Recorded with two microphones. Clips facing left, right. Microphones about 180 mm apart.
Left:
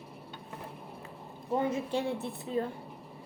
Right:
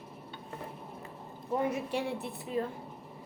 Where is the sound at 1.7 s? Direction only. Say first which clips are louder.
Left 2 dB; 25° left (ahead or behind).